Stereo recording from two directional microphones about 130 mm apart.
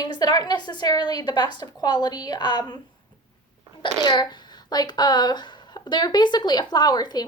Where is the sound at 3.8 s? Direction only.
35° left (ahead or behind).